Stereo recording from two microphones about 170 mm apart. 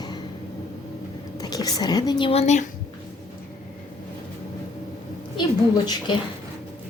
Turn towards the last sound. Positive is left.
turn(degrees=25)  # may be behind; listen again after turning